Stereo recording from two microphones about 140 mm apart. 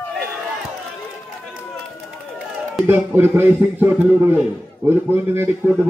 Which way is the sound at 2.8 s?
15° right (ahead or behind).